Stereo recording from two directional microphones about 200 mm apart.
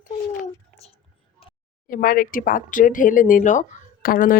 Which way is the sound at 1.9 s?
45° left (ahead or behind).